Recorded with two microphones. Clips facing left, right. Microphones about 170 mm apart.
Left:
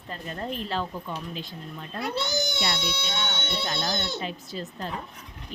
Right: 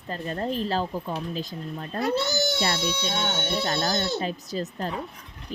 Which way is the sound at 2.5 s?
45° right (ahead or behind).